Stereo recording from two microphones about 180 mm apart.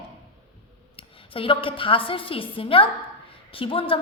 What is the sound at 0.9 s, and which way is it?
A woman's voice, 30° left (ahead or behind).